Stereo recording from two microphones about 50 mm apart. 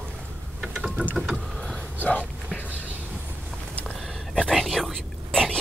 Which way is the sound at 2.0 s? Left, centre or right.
Left.